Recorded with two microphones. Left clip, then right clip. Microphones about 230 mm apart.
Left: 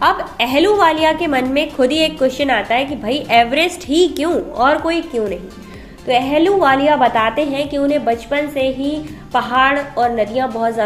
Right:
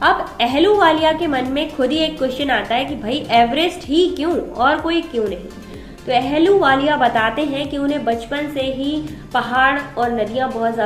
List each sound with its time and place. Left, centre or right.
0.0 s a woman's voice: left
6.1 s a woman's voice: left